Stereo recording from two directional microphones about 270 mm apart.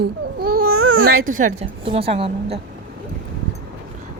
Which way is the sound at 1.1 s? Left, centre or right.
Right.